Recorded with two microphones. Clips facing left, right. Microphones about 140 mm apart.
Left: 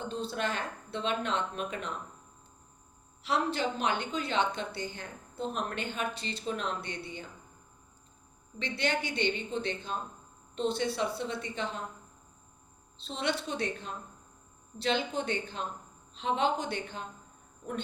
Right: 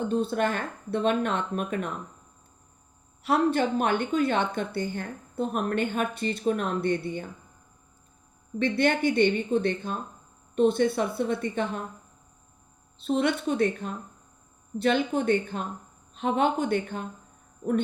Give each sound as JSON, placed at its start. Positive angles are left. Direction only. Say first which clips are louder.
{"t": 0.1, "sound": "a woman's voice", "louder": "right 6 dB", "side_deg": -50}
{"t": 3.2, "sound": "a woman's voice", "louder": "right 7 dB", "side_deg": -50}
{"t": 8.5, "sound": "a woman's voice", "louder": "right 8 dB", "side_deg": -50}
{"t": 13.0, "sound": "a woman's voice", "louder": "right 8 dB", "side_deg": -50}